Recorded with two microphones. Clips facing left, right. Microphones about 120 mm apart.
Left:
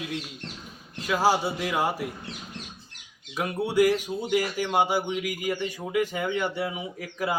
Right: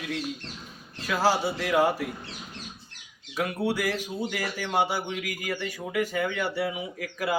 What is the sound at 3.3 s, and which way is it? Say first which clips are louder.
A man's voice: left 2 dB; 15° left (ahead or behind).